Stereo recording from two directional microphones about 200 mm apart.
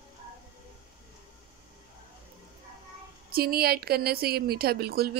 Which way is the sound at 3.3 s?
50° right (ahead or behind).